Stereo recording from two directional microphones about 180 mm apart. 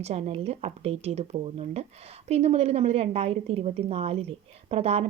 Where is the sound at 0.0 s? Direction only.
35° right (ahead or behind).